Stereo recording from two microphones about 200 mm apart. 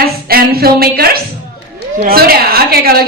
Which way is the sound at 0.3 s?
50° right (ahead or behind).